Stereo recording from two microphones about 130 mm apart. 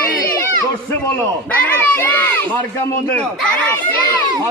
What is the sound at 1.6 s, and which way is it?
Speech, 10° left (ahead or behind).